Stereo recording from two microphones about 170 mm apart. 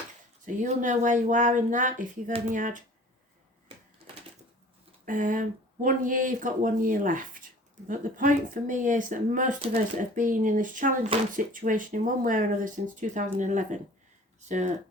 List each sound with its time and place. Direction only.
0.4 s speech: 50° right (ahead or behind)
5.0 s speech: 50° right (ahead or behind)